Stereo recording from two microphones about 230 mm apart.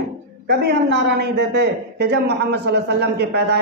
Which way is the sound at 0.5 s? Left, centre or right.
Right.